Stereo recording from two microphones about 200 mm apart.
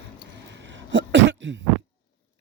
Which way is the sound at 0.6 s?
65° right (ahead or behind).